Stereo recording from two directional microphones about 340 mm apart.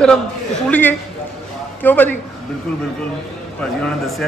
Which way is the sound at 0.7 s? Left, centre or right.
Centre.